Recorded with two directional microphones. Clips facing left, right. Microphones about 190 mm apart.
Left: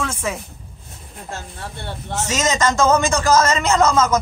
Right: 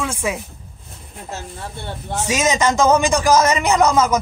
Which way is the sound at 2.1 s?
15° right (ahead or behind).